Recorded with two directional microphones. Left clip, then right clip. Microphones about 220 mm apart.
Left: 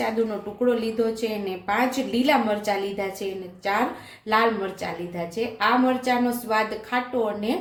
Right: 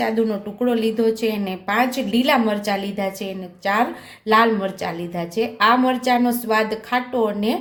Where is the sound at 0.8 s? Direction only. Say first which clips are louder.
Right 5 dB; 45° right (ahead or behind).